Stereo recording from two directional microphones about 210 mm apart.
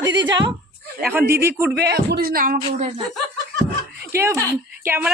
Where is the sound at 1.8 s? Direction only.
50° right (ahead or behind).